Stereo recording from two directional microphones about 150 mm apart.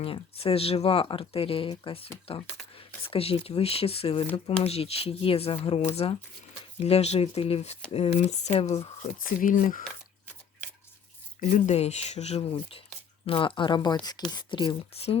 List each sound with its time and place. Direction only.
0.0 s speech: 40° left (ahead or behind)
9.4 s speech: 65° left (ahead or behind)
11.3 s speech: 55° left (ahead or behind); by 15.2 s 40° left (ahead or behind)